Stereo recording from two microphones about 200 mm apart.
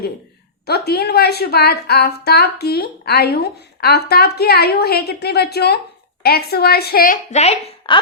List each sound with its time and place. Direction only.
0.6 s a woman's voice: 55° left (ahead or behind); by 7.9 s 35° left (ahead or behind)